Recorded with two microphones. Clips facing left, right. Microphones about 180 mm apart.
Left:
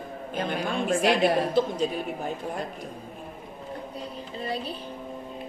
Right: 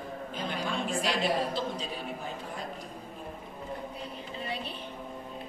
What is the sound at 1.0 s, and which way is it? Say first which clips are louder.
Speech: left 7 dB; 60° left (ahead or behind).